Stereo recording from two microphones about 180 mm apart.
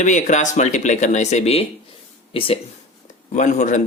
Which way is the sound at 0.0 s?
45° left (ahead or behind).